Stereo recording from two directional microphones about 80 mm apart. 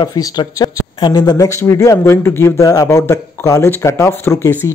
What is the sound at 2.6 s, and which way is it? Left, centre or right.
Speech, left.